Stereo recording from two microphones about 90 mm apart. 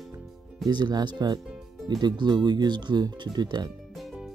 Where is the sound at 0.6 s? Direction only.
50° right (ahead or behind).